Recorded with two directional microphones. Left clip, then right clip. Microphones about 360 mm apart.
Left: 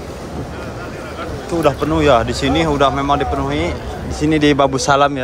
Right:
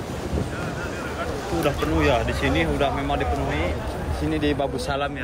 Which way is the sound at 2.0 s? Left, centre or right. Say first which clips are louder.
Left 10 dB; left.